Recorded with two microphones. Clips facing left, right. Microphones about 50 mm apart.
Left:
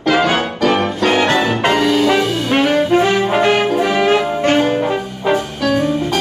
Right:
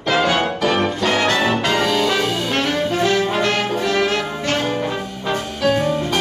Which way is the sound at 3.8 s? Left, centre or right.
Left.